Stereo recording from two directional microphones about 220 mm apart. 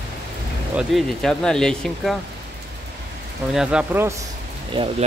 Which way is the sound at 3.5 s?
5° right (ahead or behind).